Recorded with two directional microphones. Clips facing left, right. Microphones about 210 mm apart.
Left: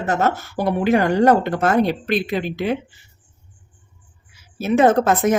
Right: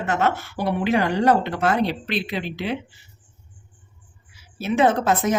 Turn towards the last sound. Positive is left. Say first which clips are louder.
# left 4 dB
turn(degrees=50)  # may be behind; listen again after turning